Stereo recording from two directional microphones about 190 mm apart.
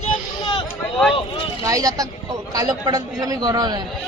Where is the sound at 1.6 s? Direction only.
15° right (ahead or behind).